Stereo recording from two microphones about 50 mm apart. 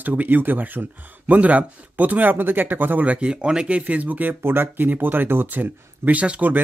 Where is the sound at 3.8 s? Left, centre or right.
Right.